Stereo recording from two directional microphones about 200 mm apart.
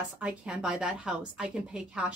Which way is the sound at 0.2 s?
5° right (ahead or behind).